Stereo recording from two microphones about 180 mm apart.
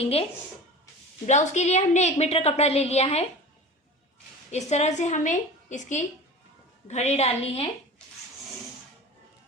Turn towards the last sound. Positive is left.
turn(degrees=35)  # may be behind; listen again after turning